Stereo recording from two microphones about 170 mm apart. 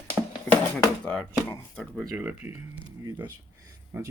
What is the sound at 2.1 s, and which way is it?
Speech, 10° right (ahead or behind).